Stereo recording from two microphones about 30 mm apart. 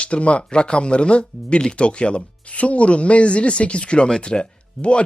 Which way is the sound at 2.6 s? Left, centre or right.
Left.